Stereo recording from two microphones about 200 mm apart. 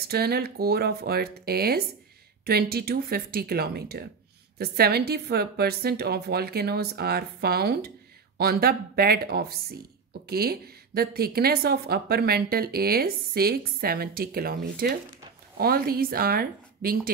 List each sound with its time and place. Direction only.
0.0 s a woman's voice: 50° right (ahead or behind)